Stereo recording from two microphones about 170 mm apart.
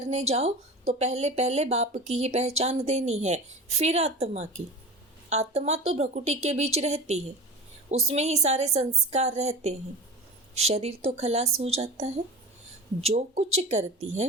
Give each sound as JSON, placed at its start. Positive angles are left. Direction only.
{"t": 0.1, "sound": "speech", "side_deg": -40}